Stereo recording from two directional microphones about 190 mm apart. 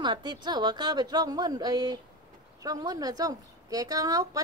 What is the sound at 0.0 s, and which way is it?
A woman's voice, 25° right (ahead or behind).